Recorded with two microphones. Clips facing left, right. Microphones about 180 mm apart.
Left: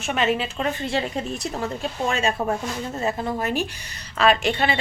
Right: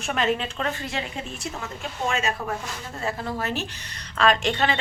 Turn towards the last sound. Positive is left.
turn(degrees=10)  # may be behind; listen again after turning